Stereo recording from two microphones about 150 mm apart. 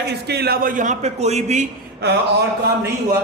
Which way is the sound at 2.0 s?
90° right.